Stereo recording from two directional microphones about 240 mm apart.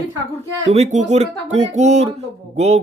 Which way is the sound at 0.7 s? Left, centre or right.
Right.